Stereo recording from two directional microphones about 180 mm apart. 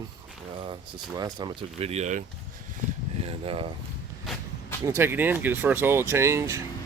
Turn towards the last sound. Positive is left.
turn(degrees=-15)  # may be behind; listen again after turning